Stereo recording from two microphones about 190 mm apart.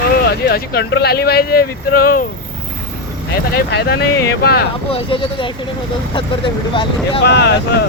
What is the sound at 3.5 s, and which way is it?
Speech, 60° left (ahead or behind).